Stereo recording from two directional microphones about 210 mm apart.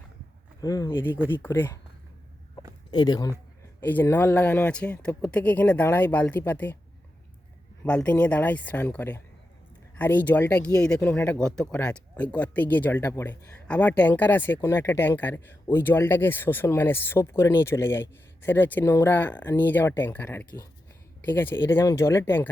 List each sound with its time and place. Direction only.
0.6 s speech: 15° left (ahead or behind)
2.9 s speech: 20° left (ahead or behind)
7.9 s speech: 5° left (ahead or behind)